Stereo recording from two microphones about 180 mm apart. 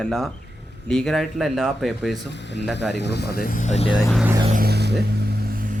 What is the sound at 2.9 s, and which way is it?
Speech, 70° left (ahead or behind).